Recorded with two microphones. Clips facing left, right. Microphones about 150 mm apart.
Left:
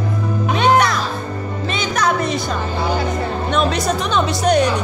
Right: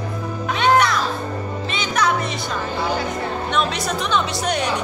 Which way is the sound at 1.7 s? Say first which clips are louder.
Left 2 dB; 40° left (ahead or behind).